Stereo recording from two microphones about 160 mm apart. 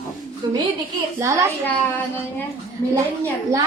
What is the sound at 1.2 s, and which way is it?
Speech, 20° right (ahead or behind).